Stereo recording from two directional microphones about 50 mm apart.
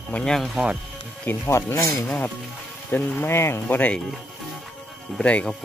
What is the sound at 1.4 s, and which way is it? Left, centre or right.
Speech, left.